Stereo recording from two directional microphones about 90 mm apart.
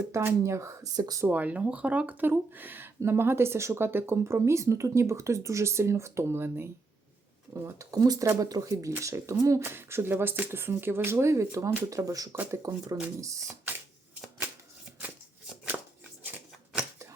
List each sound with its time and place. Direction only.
0.1 s speech: 30° right (ahead or behind)
0.9 s speech: 45° right (ahead or behind)
1.3 s speech: 15° right (ahead or behind)
7.9 s speech: 45° right (ahead or behind)
15.7 s scissors: 15° right (ahead or behind)
16.2 s a sound: 15° right (ahead or behind)